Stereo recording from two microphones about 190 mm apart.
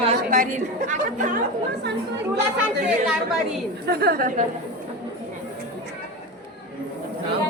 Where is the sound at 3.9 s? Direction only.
55° right (ahead or behind).